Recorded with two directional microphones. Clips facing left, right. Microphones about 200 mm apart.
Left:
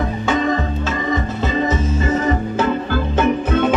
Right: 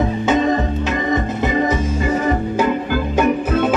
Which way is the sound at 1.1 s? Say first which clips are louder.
Right 2 dB; 15° right (ahead or behind).